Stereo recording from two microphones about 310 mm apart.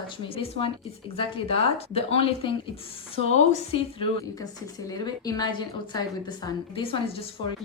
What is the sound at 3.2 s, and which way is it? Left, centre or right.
Speech, right.